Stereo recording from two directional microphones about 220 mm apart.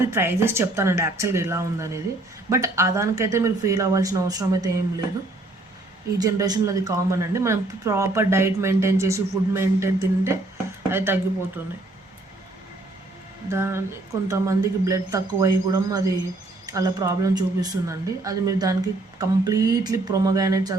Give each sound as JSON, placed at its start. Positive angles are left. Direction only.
{"t": 0.1, "sound": "speech", "side_deg": -10}
{"t": 6.1, "sound": "speech", "side_deg": -15}
{"t": 13.5, "sound": "speech", "side_deg": -10}